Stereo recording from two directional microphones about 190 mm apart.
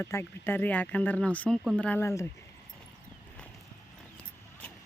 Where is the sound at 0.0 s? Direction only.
10° left (ahead or behind).